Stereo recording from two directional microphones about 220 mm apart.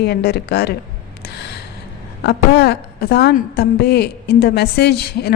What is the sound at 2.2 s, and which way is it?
A woman's voice, 50° left (ahead or behind).